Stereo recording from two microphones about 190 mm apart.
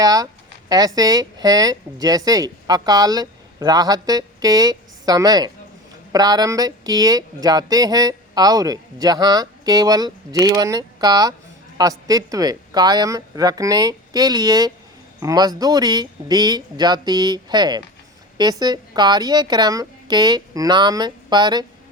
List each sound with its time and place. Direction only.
0.0 s speech: 20° right (ahead or behind)